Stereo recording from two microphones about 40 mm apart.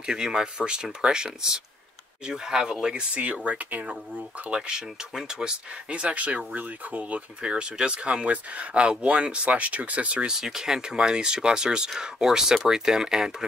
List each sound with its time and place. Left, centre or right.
0.0 s speech: centre
3.4 s speech: right
4.5 s speech: centre
5.9 s speech: right
8.3 s speech: right
10.2 s speech: centre